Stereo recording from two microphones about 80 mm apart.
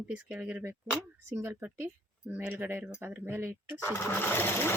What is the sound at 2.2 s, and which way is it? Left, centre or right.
Speech, right.